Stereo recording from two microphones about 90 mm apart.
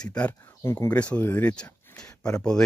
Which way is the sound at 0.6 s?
30° left (ahead or behind).